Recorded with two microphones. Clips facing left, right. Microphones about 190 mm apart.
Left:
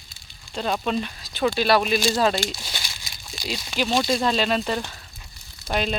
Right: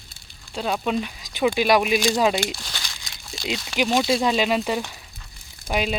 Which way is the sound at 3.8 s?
15° right (ahead or behind).